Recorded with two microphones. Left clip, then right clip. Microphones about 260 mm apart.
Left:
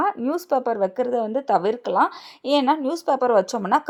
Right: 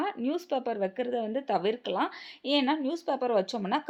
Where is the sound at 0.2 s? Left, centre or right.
Centre.